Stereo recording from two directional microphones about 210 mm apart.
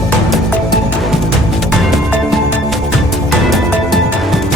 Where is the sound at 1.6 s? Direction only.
Centre (ahead or behind).